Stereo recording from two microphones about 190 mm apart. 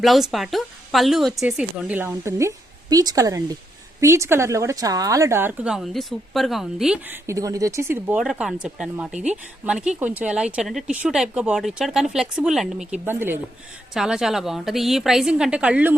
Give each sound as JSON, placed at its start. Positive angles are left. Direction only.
{"t": 0.0, "sound": "a woman's voice", "side_deg": 0}